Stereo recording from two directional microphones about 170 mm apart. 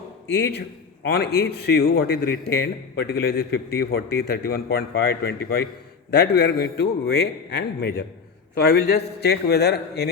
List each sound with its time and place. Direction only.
0.3 s a man's voice: 80° left